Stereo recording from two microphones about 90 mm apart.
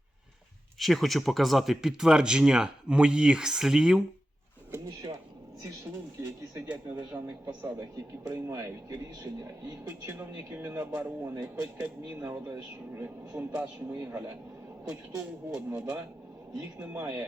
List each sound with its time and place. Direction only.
0.8 s speech: centre (ahead or behind)
6.7 s speech: 15° right (ahead or behind); by 8.7 s 30° right (ahead or behind)
8.9 s speech: 50° right (ahead or behind)
10.0 s speech: 20° right (ahead or behind)
14.8 s speech: 10° right (ahead or behind)